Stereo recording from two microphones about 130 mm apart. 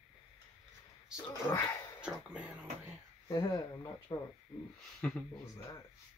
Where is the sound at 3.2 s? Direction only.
30° left (ahead or behind).